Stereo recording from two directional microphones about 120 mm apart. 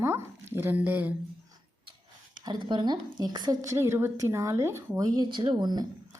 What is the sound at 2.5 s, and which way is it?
A woman's voice, 40° right (ahead or behind).